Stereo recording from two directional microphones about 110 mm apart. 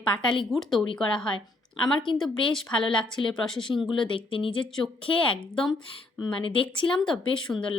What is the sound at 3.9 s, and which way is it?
Speech, 50° left (ahead or behind).